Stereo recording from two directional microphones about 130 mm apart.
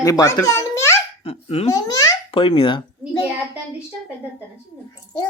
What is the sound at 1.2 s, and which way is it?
Speech, 50° left (ahead or behind).